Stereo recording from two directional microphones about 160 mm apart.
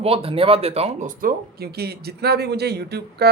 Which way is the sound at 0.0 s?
35° right (ahead or behind).